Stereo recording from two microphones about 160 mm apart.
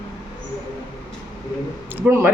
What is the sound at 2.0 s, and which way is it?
Speech, 15° right (ahead or behind).